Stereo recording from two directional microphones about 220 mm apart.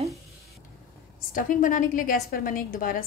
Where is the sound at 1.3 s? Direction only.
35° left (ahead or behind).